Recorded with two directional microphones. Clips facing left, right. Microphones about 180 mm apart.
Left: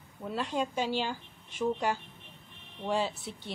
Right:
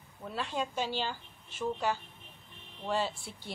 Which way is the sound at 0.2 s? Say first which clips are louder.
Left 3 dB; 10° left (ahead or behind).